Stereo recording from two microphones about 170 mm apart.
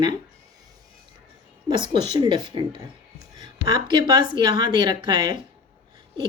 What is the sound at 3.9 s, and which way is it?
A woman's voice, 25° right (ahead or behind).